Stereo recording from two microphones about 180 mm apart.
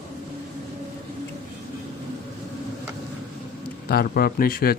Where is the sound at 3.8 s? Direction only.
60° left (ahead or behind).